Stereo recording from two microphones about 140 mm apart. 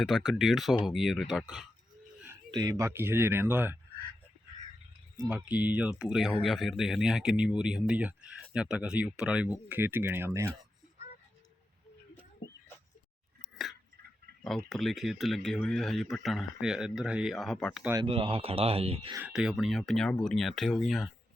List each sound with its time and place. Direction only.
0.3 s speech: centre (ahead or behind)
2.3 s speech: 30° right (ahead or behind)
5.3 s speech: 10° right (ahead or behind)
14.7 s speech: centre (ahead or behind)
18.0 s speech: 40° right (ahead or behind)
19.3 s speech: 5° right (ahead or behind)